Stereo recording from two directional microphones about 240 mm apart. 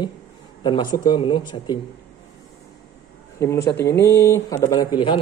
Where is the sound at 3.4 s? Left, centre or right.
Centre.